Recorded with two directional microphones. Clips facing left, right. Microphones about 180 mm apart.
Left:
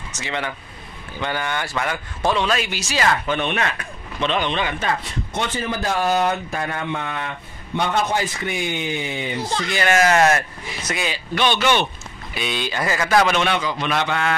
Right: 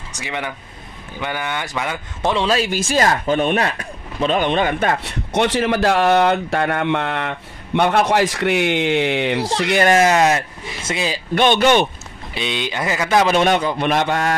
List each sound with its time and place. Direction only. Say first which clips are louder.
0.1 s a man's voice: right 1 dB; 15° right (ahead or behind); by 2.7 s 30° right (ahead or behind)
2.7 s a man's voice: right 4 dB; 50° right (ahead or behind); by 9.5 s 80° right
9.8 s speech: right 2 dB; 30° right (ahead or behind)
10.1 s speech: right 1 dB; 15° right (ahead or behind)
11.3 s speech: right 5 dB; 50° right (ahead or behind)
12.4 s speech: right 1 dB; 20° right (ahead or behind)
13.3 s speech: right 5 dB; 45° right (ahead or behind)